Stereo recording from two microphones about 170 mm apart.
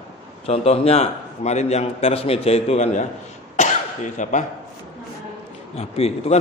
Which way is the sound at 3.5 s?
45° left (ahead or behind).